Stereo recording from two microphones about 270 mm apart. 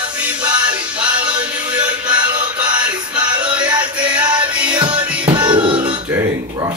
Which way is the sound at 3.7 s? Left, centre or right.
Centre.